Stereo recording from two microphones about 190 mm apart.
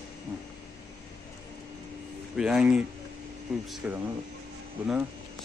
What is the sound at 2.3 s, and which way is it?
Speech, 5° right (ahead or behind).